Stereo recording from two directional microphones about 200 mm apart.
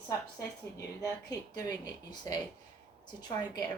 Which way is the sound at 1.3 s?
20° left (ahead or behind).